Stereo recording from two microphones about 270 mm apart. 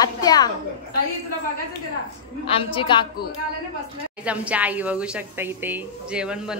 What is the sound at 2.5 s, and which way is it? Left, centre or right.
Speech, centre.